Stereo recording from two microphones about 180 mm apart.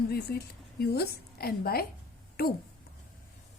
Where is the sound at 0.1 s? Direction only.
60° left (ahead or behind).